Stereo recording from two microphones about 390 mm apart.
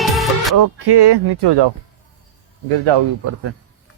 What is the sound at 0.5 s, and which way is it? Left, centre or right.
Speech, right.